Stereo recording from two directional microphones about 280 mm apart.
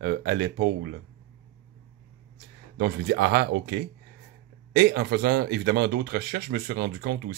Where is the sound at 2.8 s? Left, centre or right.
Right.